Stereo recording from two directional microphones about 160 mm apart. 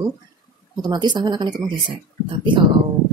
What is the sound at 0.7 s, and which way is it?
Speech, 25° right (ahead or behind).